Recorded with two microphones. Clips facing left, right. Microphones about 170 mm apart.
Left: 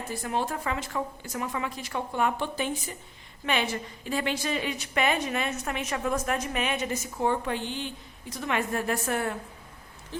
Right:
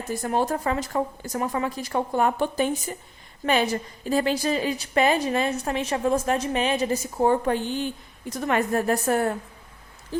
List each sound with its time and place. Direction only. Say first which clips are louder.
0.1 s a woman's voice: right 6 dB; 45° right (ahead or behind)